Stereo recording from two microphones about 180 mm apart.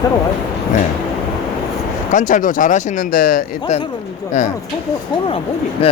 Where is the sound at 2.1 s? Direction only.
45° left (ahead or behind).